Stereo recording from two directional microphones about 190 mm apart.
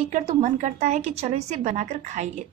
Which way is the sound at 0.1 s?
40° right (ahead or behind).